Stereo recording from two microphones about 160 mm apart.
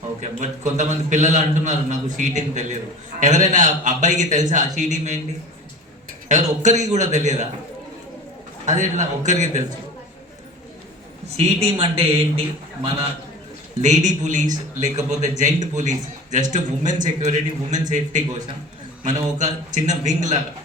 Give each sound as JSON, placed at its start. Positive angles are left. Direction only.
{"t": 0.2, "sound": "a man's voice", "side_deg": -50}
{"t": 6.2, "sound": "a man's voice", "side_deg": -45}
{"t": 8.6, "sound": "a man's voice", "side_deg": -50}
{"t": 11.3, "sound": "a man's voice", "side_deg": -40}
{"t": 13.8, "sound": "a man's voice", "side_deg": -50}